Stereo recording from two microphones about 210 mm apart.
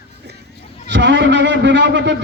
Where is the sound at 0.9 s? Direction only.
55° right (ahead or behind).